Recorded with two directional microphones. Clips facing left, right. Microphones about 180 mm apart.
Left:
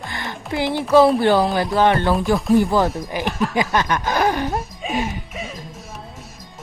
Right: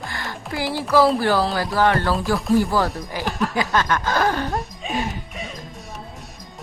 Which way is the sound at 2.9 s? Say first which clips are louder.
Left 4 dB; centre (ahead or behind).